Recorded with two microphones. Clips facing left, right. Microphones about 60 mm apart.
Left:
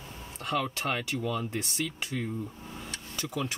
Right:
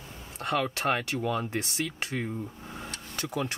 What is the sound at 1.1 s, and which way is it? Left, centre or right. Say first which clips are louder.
Speech: right 2 dB; right.